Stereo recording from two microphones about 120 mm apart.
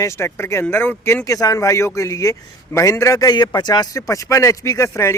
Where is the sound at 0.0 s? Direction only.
25° left (ahead or behind).